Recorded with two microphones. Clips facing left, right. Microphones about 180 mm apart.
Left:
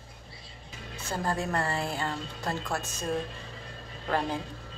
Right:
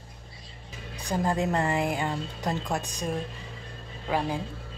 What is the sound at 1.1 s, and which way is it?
Speech, 20° right (ahead or behind).